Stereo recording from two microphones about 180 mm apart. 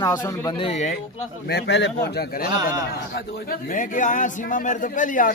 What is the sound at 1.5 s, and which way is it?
Speech, 70° left (ahead or behind).